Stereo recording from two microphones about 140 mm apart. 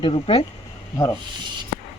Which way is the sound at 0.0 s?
40° left (ahead or behind).